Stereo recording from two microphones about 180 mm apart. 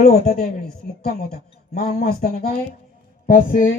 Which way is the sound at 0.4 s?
60° left (ahead or behind).